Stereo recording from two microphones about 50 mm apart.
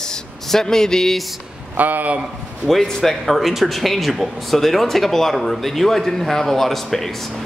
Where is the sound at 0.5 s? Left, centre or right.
Centre.